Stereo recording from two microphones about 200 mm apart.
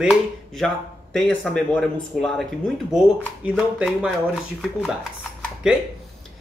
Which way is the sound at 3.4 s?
5° right (ahead or behind).